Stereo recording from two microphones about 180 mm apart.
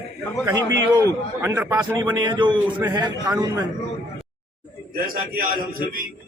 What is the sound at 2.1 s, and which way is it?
A man's voice, 25° right (ahead or behind).